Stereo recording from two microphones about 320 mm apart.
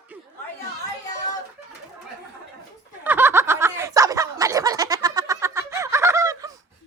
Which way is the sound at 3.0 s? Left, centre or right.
Centre.